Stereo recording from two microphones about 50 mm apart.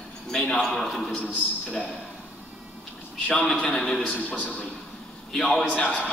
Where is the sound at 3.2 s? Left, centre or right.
Centre.